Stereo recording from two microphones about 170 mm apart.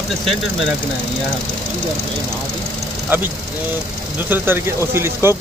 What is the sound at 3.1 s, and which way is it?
Speech, 10° right (ahead or behind).